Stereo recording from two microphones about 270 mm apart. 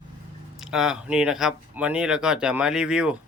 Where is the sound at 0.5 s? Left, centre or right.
Centre.